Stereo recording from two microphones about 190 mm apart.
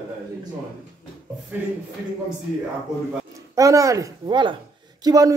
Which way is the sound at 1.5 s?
10° right (ahead or behind).